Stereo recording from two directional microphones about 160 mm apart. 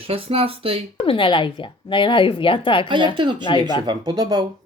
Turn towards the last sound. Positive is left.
turn(degrees=-25)  # may be behind; listen again after turning